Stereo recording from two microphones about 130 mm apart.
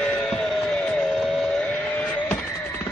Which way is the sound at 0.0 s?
5° left (ahead or behind).